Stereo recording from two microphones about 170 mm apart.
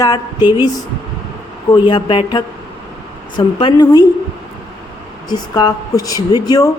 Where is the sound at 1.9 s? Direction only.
30° left (ahead or behind).